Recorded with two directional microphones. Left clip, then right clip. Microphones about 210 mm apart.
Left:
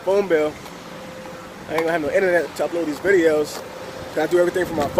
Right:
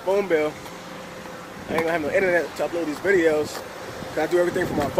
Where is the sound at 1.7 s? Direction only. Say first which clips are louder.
Left 2 dB; 10° left (ahead or behind).